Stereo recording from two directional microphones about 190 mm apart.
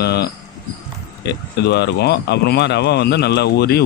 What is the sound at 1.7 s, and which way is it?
Speech, 65° left (ahead or behind).